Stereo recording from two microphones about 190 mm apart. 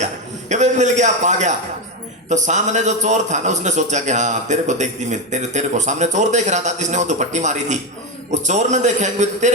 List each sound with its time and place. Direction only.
0.0 s a man's voice: 40° right (ahead or behind)